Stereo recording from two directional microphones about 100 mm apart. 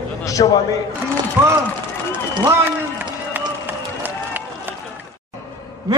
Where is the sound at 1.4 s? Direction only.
15° right (ahead or behind).